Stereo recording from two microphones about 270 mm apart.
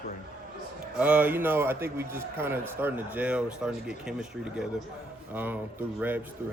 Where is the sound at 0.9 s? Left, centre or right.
Centre.